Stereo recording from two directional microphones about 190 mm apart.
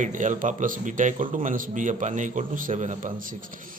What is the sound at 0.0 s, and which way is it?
A man's voice, 40° right (ahead or behind).